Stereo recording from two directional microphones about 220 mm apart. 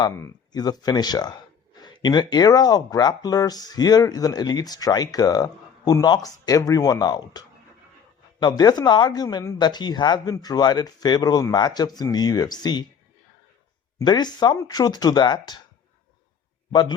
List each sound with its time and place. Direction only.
0.0 s speech: 15° left (ahead or behind)
14.0 s speech: 20° left (ahead or behind)